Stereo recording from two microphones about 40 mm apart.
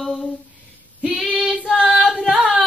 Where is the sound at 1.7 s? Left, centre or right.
Centre.